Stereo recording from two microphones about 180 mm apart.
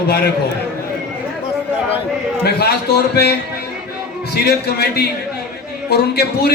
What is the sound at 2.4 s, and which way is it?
Speech, 60° left (ahead or behind).